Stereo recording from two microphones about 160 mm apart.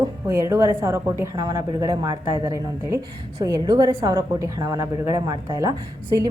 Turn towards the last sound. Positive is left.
turn(degrees=-25)  # may be behind; listen again after turning